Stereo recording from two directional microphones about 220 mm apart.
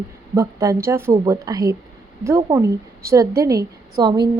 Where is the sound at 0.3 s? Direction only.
15° right (ahead or behind).